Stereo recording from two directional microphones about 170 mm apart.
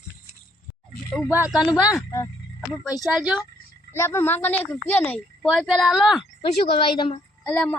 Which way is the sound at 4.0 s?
15° left (ahead or behind).